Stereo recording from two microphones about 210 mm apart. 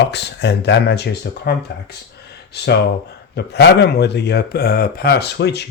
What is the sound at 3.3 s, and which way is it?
Speech, 50° left (ahead or behind).